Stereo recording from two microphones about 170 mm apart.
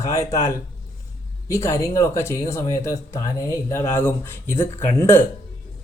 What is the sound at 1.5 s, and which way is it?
Speech, 15° left (ahead or behind).